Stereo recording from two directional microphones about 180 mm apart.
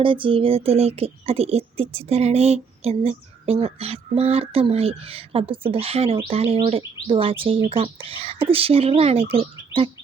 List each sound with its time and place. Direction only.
0.0 s speech: 30° right (ahead or behind)